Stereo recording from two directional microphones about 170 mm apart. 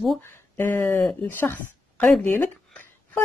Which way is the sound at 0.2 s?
15° left (ahead or behind).